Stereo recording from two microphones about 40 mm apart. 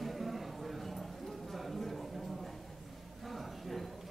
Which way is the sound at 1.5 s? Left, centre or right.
Centre.